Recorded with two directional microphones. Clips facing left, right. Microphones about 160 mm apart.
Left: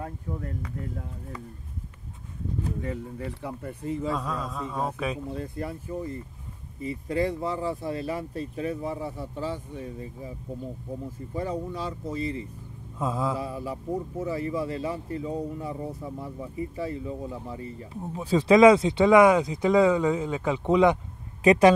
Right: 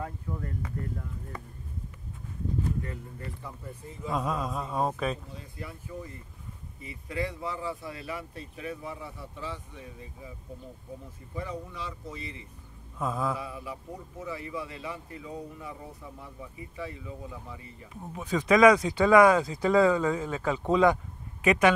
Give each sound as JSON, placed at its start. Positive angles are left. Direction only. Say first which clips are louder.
{"t": 2.8, "sound": "speech", "louder": "left 7 dB", "side_deg": 90}
{"t": 4.6, "sound": "speech", "louder": "right 1 dB", "side_deg": -10}
{"t": 4.9, "sound": "speech", "louder": "left 1 dB", "side_deg": 10}
{"t": 5.3, "sound": "speech", "louder": "left 10 dB", "side_deg": 50}
{"t": 11.3, "sound": "speech", "louder": "left 6 dB", "side_deg": 40}
{"t": 13.0, "sound": "speech", "louder": "left 2 dB", "side_deg": 25}
{"t": 13.4, "sound": "speech", "louder": "left 6 dB", "side_deg": 35}
{"t": 21.4, "sound": "speech", "louder": "left 5 dB", "side_deg": 35}